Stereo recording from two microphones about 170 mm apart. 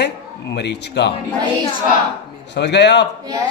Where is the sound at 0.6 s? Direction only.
85° left.